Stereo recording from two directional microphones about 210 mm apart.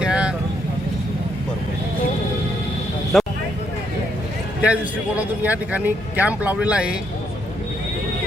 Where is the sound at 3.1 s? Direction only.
Centre (ahead or behind).